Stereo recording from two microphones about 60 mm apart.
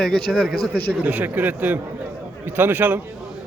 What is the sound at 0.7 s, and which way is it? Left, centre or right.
A man's voice, right.